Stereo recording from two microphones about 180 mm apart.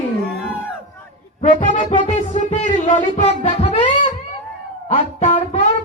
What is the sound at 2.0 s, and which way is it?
Music, 45° left (ahead or behind).